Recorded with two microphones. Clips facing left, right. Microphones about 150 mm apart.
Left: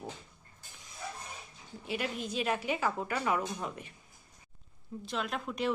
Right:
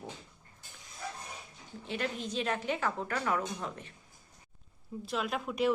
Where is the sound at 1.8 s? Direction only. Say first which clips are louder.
Even; 10° left (ahead or behind).